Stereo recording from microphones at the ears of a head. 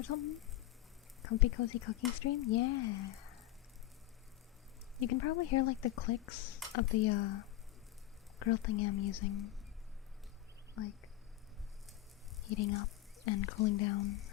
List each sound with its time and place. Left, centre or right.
0.0 s speech: left
4.9 s speech: left
12.5 s speech: left